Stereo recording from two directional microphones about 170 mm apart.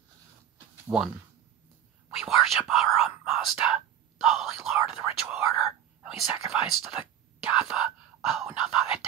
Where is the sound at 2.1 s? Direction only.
Centre (ahead or behind).